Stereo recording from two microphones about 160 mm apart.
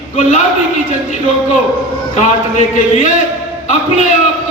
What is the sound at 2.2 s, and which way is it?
Speech, 50° left (ahead or behind).